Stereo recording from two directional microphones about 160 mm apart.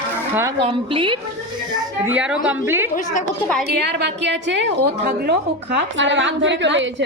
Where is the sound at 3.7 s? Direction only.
90° right.